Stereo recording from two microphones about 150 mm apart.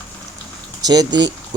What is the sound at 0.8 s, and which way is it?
Speech, 25° right (ahead or behind).